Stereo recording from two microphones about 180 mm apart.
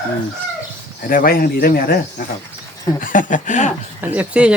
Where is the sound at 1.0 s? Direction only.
50° left (ahead or behind).